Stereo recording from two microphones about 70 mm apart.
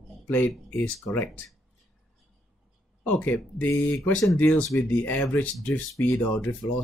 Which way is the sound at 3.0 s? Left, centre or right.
Left.